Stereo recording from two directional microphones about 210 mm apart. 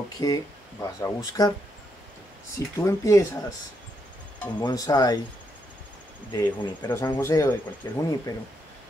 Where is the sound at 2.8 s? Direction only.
15° left (ahead or behind).